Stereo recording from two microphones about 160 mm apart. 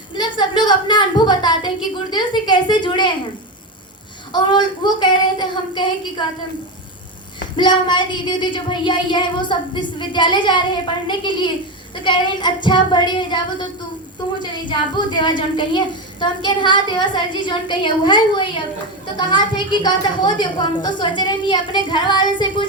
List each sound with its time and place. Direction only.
0.2 s a woman's voice: 25° left (ahead or behind)
4.3 s speech: 25° left (ahead or behind)
7.5 s speech: 30° left (ahead or behind)